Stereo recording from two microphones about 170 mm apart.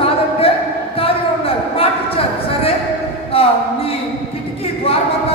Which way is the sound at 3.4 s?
35° left (ahead or behind).